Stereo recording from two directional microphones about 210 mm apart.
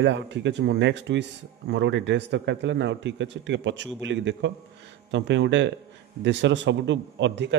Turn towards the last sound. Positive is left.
turn(degrees=-60)  # may be behind; listen again after turning